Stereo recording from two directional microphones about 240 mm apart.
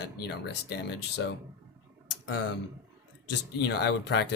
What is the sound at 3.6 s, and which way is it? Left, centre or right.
Speech, left.